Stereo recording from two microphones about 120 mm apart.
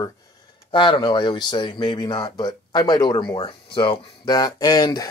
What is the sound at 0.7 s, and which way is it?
Speech, 40° left (ahead or behind).